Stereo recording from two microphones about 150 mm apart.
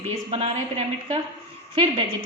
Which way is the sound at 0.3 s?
40° right (ahead or behind).